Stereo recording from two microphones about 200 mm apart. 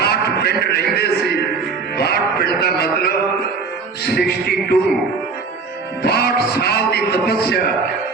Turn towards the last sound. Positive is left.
turn(degrees=50)  # may be behind; listen again after turning